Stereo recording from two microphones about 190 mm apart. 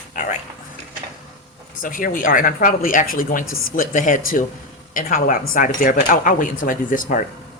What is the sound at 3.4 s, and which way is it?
Speech, 90° left.